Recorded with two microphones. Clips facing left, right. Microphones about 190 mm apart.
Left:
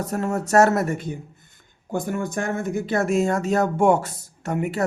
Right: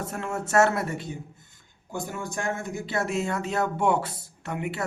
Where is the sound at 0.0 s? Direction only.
40° left (ahead or behind).